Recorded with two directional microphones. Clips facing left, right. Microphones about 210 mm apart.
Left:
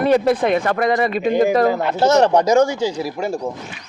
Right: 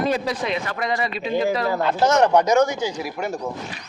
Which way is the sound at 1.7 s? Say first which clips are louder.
Left 3 dB; 20° left (ahead or behind).